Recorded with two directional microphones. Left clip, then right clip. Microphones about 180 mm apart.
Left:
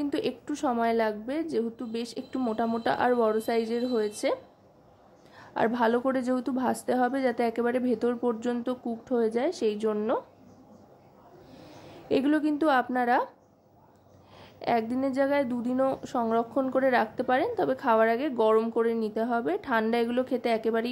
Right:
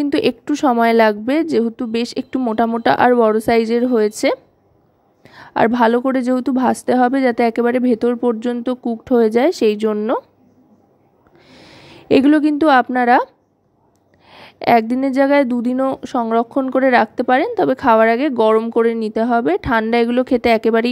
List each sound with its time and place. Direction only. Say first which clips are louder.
0.0 s a woman's voice: right 13 dB; 45° right (ahead or behind)
11.5 s a woman's voice: right 8 dB; 45° right (ahead or behind)
14.3 s a woman's voice: right 14 dB; 45° right (ahead or behind)